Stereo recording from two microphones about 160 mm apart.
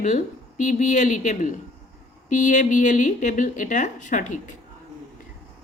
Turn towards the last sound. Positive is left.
turn(degrees=50)  # may be behind; listen again after turning